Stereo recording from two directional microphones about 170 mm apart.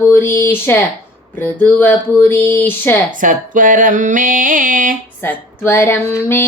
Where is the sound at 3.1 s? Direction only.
50° right (ahead or behind).